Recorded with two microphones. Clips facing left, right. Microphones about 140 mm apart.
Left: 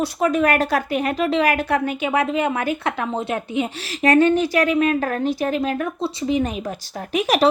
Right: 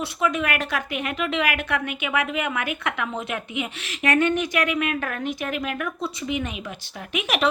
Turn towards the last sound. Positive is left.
turn(degrees=35)  # may be behind; listen again after turning